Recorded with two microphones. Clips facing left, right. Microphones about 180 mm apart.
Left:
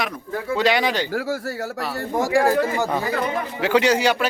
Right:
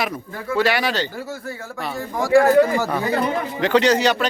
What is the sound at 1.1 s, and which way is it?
Speech, 90° left.